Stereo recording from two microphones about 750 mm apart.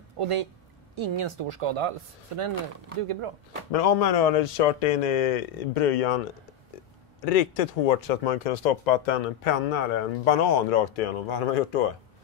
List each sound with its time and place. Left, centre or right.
0.2 s speech: right
3.7 s speech: left
7.2 s speech: left